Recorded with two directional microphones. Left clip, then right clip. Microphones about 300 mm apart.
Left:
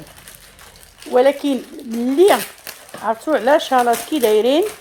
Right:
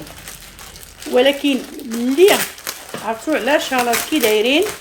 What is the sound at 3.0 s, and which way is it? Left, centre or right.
Speech, centre.